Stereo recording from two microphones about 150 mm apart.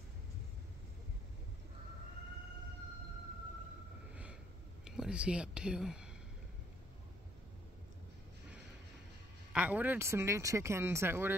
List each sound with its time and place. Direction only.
4.1 s snort: 10° right (ahead or behind)
4.8 s speech: 5° right (ahead or behind)
9.5 s speech: 10° right (ahead or behind)